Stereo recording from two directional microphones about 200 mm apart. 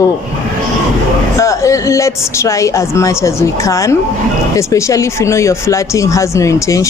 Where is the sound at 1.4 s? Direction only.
15° left (ahead or behind).